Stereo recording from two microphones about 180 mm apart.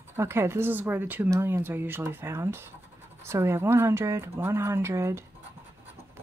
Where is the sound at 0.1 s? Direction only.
15° right (ahead or behind).